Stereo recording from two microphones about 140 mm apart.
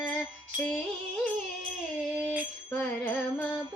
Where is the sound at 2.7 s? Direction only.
10° left (ahead or behind).